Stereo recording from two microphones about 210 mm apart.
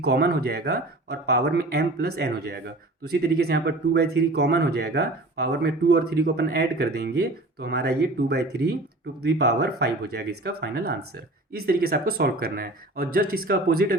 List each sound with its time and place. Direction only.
0.0 s speech: 50° right (ahead or behind)